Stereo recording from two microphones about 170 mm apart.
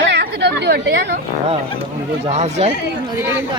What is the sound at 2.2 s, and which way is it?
Speech, 40° right (ahead or behind).